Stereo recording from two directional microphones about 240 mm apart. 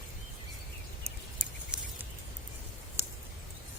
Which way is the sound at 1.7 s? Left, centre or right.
Centre.